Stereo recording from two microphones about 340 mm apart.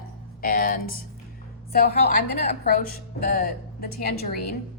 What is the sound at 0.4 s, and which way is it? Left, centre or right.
A woman's voice, left.